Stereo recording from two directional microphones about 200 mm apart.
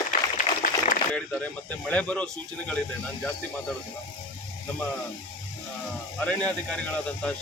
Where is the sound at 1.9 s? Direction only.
5° left (ahead or behind).